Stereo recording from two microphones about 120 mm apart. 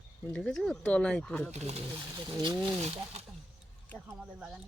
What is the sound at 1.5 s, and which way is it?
Speech, 70° right (ahead or behind).